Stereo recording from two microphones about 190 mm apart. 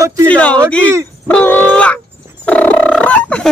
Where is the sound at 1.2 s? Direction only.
10° left (ahead or behind).